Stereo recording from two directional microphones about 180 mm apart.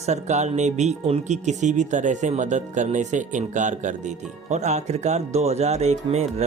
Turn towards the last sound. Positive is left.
turn(degrees=-35)  # may be behind; listen again after turning